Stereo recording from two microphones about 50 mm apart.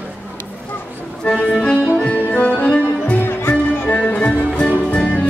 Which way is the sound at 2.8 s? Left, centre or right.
Left.